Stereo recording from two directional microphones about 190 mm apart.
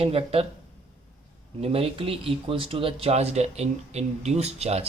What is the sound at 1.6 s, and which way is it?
Speech, 30° right (ahead or behind).